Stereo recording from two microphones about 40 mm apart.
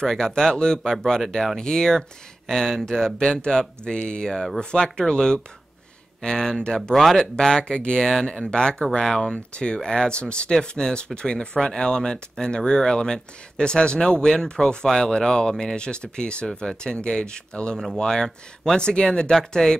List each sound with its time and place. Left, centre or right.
0.0 s speech: centre